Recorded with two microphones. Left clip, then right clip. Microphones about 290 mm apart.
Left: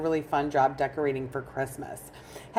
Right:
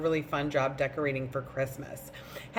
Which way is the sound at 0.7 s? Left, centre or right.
Left.